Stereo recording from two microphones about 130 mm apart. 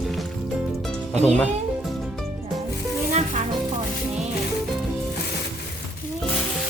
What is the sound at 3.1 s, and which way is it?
Music, 60° right (ahead or behind).